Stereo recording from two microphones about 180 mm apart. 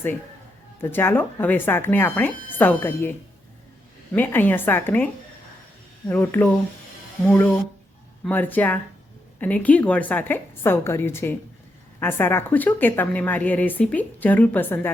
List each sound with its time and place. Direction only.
0.8 s speech: 10° left (ahead or behind)
6.1 s speech: 10° left (ahead or behind)